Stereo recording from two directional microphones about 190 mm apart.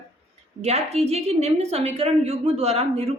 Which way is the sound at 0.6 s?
35° right (ahead or behind).